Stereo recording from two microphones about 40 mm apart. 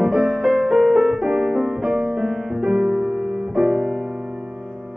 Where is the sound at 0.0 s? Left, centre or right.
Centre.